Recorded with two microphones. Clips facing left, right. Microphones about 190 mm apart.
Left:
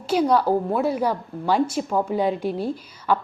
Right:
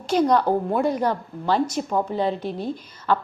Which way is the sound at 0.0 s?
10° left (ahead or behind).